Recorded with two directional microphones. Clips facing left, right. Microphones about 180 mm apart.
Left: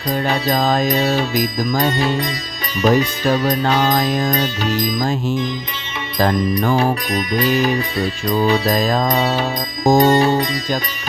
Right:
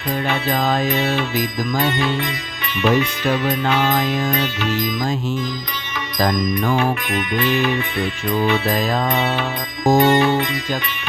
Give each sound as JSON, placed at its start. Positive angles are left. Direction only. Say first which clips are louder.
{"t": 0.3, "sound": "music", "louder": "left 2 dB", "side_deg": 35}
{"t": 6.1, "sound": "music", "louder": "left 2 dB", "side_deg": 30}